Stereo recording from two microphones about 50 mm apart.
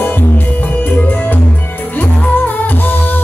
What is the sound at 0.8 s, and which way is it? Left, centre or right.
Music, left.